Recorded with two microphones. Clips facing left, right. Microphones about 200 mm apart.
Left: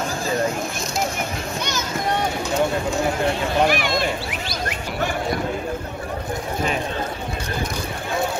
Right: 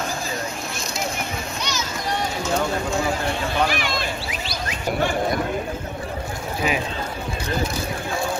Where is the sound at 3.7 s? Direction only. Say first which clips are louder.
Left 4 dB; 55° left (ahead or behind).